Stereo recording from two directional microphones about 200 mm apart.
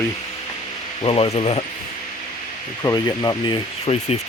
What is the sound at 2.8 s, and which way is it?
Speech, 20° left (ahead or behind).